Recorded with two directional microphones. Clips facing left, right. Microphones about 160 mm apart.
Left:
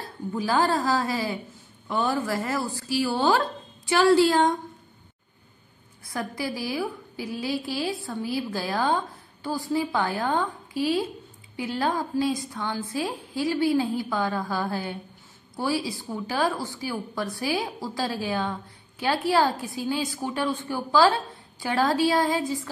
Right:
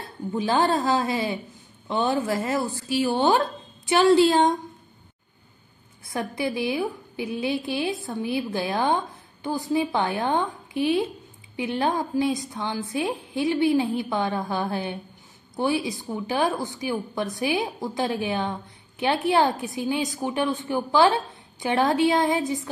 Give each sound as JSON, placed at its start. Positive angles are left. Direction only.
{"t": 0.4, "sound": "a woman's voice", "side_deg": -20}
{"t": 6.0, "sound": "a woman's voice", "side_deg": -20}